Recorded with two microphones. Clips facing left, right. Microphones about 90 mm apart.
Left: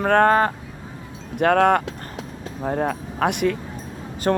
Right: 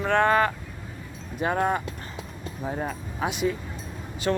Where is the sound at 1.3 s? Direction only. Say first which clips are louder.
Left 8 dB; 65° left (ahead or behind).